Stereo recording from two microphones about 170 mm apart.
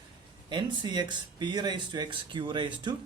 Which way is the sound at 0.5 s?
25° right (ahead or behind).